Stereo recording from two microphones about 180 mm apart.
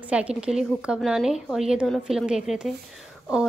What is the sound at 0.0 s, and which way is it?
A woman's voice, 5° right (ahead or behind).